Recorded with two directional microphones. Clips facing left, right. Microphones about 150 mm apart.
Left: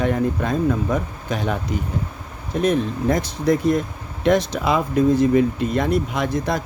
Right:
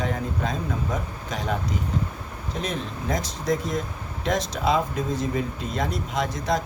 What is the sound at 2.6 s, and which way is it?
Speech, 55° left (ahead or behind).